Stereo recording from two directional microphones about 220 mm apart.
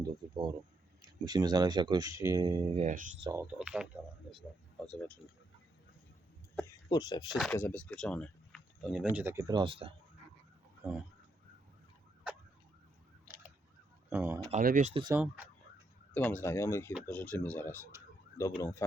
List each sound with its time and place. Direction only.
0.0 s speech: 20° right (ahead or behind)
2.7 s speech: 35° right (ahead or behind)
3.2 s speech: 10° right (ahead or behind)
4.9 s speech: 5° left (ahead or behind)
6.9 s speech: 20° left (ahead or behind)
7.5 s speech: 10° left (ahead or behind); by 9.9 s 25° right (ahead or behind)
10.8 s speech: 10° right (ahead or behind)
12.3 s emergency vehicle: 5° right (ahead or behind)
13.2 s a sound: 10° right (ahead or behind)
14.1 s speech: 10° right (ahead or behind)
14.5 s speech: 35° right (ahead or behind)
15.0 s speech: 10° right (ahead or behind)
16.1 s speech: 10° left (ahead or behind)